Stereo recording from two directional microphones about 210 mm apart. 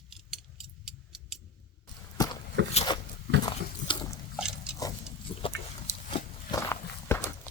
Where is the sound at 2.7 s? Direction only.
30° left (ahead or behind).